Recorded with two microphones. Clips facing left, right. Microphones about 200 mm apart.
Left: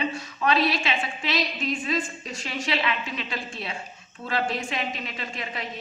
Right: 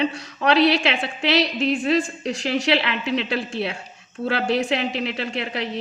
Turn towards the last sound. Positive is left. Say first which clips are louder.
# right 8 dB
turn(degrees=-70)  # may be behind; listen again after turning